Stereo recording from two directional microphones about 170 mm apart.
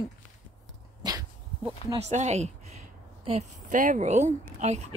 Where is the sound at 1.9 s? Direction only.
40° right (ahead or behind).